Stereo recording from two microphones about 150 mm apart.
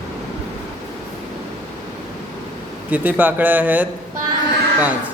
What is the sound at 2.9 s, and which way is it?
Speech, 10° right (ahead or behind).